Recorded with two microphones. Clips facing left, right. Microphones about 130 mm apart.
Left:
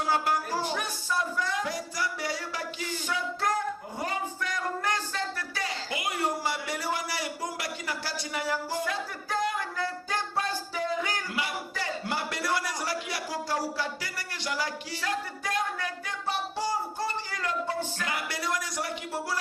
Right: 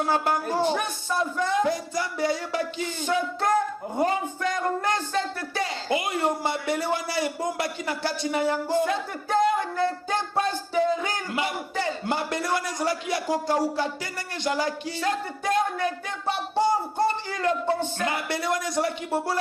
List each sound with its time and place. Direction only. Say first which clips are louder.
0.5 s a man's voice: right 6 dB; 25° right (ahead or behind)